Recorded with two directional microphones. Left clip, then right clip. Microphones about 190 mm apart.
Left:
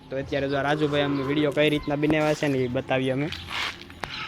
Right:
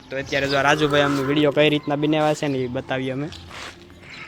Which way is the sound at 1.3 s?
50° right (ahead or behind).